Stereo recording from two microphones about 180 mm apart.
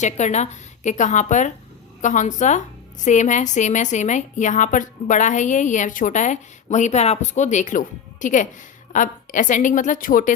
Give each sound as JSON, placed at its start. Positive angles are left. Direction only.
{"t": 0.0, "sound": "a woman's voice", "side_deg": 40}